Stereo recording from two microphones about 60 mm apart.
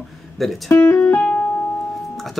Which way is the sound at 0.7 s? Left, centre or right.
Left.